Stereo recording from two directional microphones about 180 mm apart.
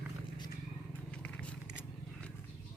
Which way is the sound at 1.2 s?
5° left (ahead or behind).